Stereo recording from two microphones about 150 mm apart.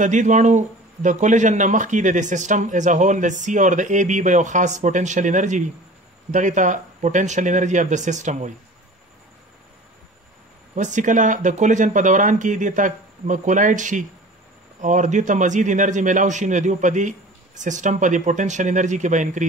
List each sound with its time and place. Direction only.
0.0 s speech: 55° right (ahead or behind)
10.7 s speech: 55° right (ahead or behind)